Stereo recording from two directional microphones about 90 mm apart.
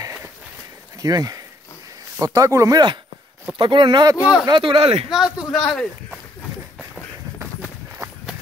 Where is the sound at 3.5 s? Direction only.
65° right (ahead or behind).